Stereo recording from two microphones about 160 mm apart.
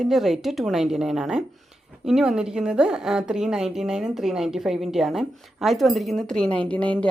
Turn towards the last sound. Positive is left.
turn(degrees=10)  # may be behind; listen again after turning